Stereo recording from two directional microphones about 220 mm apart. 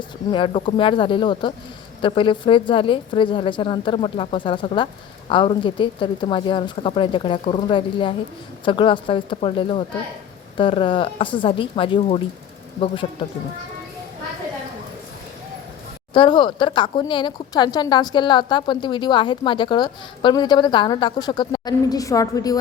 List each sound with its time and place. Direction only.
0.3 s speech: 20° left (ahead or behind)
16.1 s speech: 20° left (ahead or behind)